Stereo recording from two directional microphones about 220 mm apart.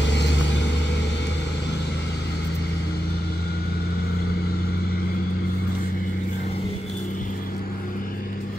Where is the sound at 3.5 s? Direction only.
45° left (ahead or behind).